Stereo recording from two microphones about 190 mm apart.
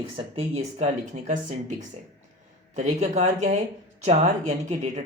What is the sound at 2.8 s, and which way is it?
Speech, 35° right (ahead or behind).